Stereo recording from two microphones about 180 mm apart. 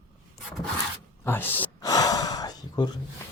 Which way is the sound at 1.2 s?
10° left (ahead or behind).